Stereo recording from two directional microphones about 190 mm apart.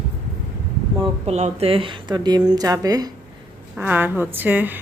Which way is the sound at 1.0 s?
35° right (ahead or behind).